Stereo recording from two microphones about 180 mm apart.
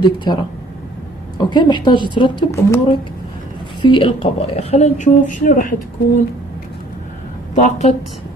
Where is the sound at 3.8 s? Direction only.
30° left (ahead or behind); by 5.7 s 50° left (ahead or behind).